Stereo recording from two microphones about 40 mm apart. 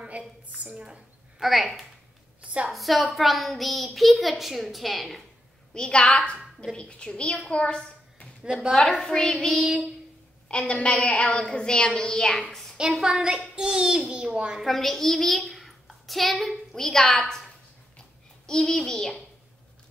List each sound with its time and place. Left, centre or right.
0.2 s a woman's voice: right
1.4 s a child's voice: centre
2.4 s a woman's voice: right
2.7 s a child's voice: centre
5.7 s a woman's voice: left
7.4 s a sound: left
8.7 s a child's voice: centre
10.7 s a woman's voice: left; by 12.6 s centre
12.7 s a woman's voice: right
14.6 s a child's voice: centre
18.6 s a child's voice: centre